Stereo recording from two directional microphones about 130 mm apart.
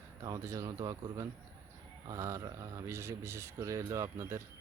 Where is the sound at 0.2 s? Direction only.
25° right (ahead or behind).